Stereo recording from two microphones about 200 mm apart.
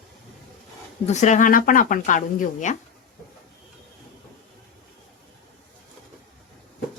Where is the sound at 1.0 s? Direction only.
35° left (ahead or behind).